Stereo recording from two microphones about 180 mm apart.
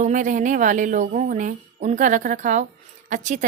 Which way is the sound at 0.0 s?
45° right (ahead or behind).